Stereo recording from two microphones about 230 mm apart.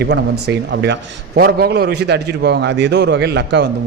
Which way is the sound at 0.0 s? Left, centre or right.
Right.